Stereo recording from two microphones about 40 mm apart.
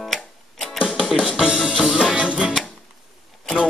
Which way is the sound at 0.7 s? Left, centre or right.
Centre.